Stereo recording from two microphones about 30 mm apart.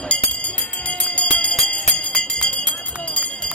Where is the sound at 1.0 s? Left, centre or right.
Left.